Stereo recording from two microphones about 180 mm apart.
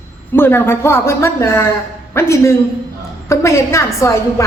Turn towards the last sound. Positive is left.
turn(degrees=15)  # may be behind; listen again after turning